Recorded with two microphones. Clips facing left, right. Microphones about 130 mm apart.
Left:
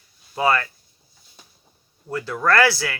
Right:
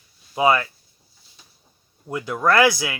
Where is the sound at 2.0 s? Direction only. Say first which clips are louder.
Right 1 dB; 15° right (ahead or behind).